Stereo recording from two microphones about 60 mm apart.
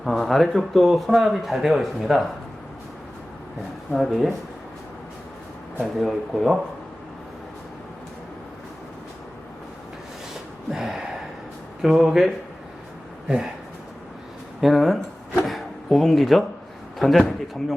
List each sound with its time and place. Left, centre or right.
0.0 s speech: centre
3.9 s speech: centre
6.0 s speech: centre
10.7 s gasp: centre
11.8 s speech: centre
13.2 s speech: centre
14.6 s speech: centre
15.4 s a sound: centre
17.0 s speech: centre